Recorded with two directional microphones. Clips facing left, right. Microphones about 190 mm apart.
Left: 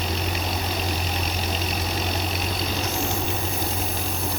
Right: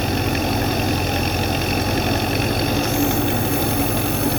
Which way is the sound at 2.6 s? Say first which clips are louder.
Right 8 dB; 60° right (ahead or behind).